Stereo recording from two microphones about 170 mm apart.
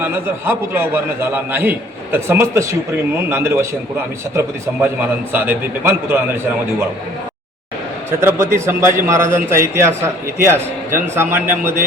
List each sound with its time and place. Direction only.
0.0 s a man's voice: 15° right (ahead or behind)
5.3 s a man's voice: 10° right (ahead or behind)
8.2 s a man's voice: 15° right (ahead or behind)